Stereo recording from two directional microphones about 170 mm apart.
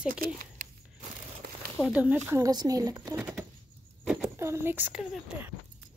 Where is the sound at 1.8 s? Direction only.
5° right (ahead or behind).